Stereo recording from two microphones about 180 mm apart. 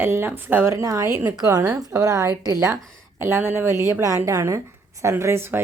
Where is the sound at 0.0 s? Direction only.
10° right (ahead or behind).